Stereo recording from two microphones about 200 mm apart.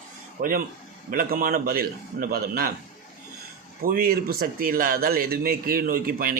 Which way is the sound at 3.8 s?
45° right (ahead or behind).